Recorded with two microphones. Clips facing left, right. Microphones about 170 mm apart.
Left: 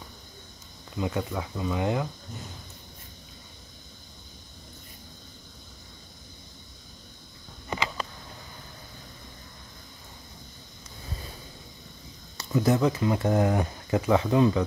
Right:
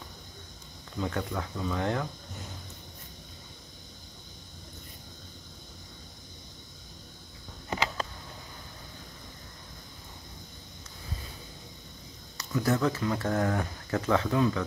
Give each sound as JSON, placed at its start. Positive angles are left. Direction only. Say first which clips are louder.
{"t": 0.9, "sound": "speech", "louder": "left 2 dB", "side_deg": 10}
{"t": 12.4, "sound": "speech", "louder": "left 4 dB", "side_deg": 20}